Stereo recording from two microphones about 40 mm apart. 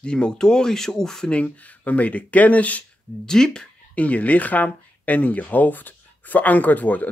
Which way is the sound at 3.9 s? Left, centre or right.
Left.